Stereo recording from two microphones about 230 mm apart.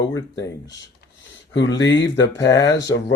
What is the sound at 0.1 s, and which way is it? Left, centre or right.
Speech, centre.